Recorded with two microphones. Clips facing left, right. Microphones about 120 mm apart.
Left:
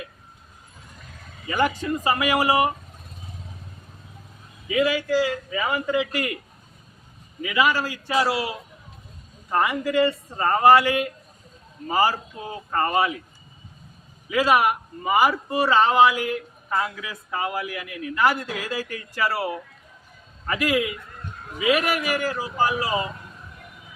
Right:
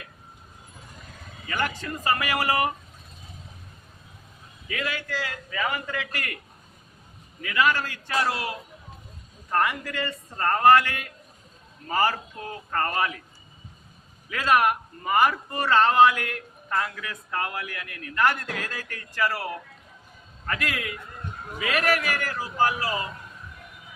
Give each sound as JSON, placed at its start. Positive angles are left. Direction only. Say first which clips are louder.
{"t": 1.5, "sound": "a man's voice", "louder": "left 6 dB", "side_deg": 15}
{"t": 4.7, "sound": "a man's voice", "louder": "left 10 dB", "side_deg": 15}
{"t": 7.4, "sound": "a man's voice", "louder": "left 2 dB", "side_deg": 15}
{"t": 14.3, "sound": "a man's voice", "louder": "left 2 dB", "side_deg": 10}
{"t": 20.5, "sound": "a man's voice", "louder": "left 7 dB", "side_deg": 10}